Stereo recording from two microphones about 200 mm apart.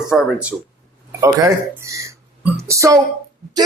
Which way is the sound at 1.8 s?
15° right (ahead or behind).